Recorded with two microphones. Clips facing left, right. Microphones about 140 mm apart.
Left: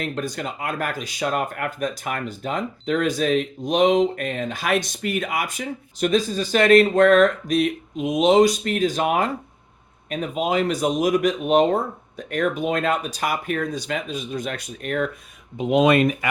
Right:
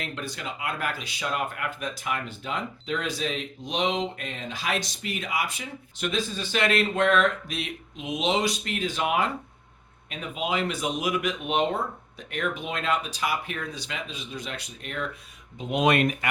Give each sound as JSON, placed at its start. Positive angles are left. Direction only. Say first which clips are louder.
{"t": 0.0, "sound": "speech", "louder": "left 7 dB", "side_deg": 45}